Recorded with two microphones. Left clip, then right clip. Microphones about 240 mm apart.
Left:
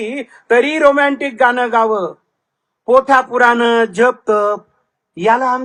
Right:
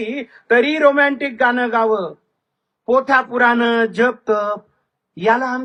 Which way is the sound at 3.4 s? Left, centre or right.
Centre.